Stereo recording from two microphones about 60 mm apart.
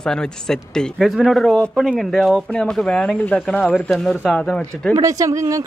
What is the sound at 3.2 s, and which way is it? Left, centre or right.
Speech, left.